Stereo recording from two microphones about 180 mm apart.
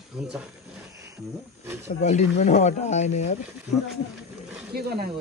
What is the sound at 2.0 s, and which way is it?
Speech, 40° left (ahead or behind).